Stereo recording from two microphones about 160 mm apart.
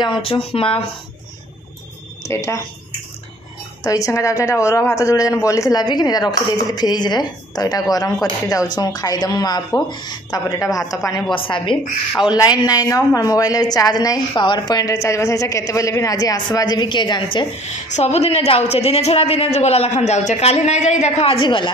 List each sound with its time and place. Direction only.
0.0 s a woman's voice: 35° left (ahead or behind)
2.2 s a woman's voice: 20° left (ahead or behind)
3.8 s a woman's voice: 20° left (ahead or behind)
11.3 s a woman's voice: 35° left (ahead or behind)
17.9 s a woman's voice: 45° left (ahead or behind)